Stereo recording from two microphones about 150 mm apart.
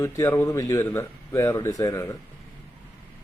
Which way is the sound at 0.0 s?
15° left (ahead or behind).